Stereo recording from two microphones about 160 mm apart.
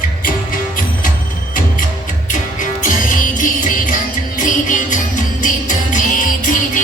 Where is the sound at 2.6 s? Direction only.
55° left (ahead or behind).